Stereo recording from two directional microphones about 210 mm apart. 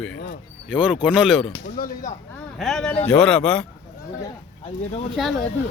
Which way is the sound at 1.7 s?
40° left (ahead or behind).